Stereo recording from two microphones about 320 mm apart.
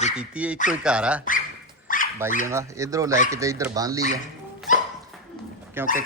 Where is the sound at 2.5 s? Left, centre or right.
Centre.